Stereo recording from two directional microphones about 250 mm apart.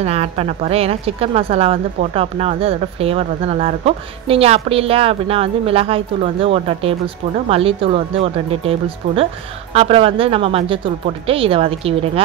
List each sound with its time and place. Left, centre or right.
0.0 s a woman's voice: right